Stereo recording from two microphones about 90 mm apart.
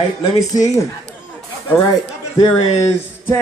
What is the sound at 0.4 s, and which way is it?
Speech, 40° left (ahead or behind).